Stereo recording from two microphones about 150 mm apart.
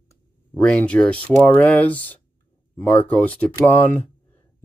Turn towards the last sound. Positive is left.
turn(degrees=10)  # may be behind; listen again after turning